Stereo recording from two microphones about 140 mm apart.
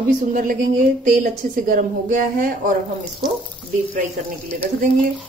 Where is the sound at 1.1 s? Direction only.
70° right (ahead or behind).